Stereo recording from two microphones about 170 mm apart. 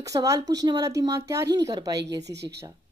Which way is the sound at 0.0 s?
20° right (ahead or behind).